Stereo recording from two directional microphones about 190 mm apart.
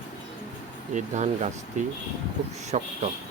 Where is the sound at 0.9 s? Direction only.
40° right (ahead or behind).